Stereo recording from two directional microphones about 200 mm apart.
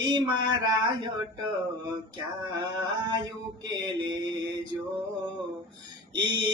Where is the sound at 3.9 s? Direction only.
20° right (ahead or behind).